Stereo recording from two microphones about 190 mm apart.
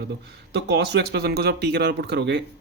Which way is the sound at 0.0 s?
60° right (ahead or behind).